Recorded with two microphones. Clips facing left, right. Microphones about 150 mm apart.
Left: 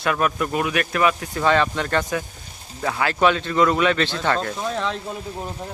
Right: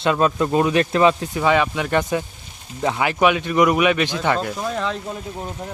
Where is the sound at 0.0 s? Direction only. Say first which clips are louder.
Right 4 dB; 25° right (ahead or behind).